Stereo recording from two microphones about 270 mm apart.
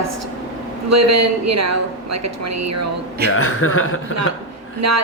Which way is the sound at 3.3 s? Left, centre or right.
Left.